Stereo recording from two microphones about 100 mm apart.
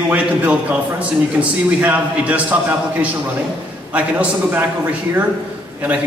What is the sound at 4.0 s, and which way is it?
A man's voice, 15° right (ahead or behind).